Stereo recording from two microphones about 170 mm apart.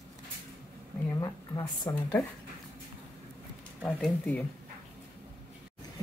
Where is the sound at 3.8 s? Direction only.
5° left (ahead or behind).